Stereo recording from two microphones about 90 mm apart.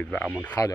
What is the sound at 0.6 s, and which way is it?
Speech, 40° left (ahead or behind).